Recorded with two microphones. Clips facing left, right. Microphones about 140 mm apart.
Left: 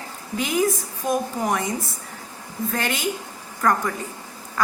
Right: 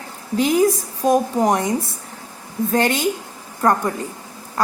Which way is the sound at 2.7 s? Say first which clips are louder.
Right 8 dB; 35° right (ahead or behind).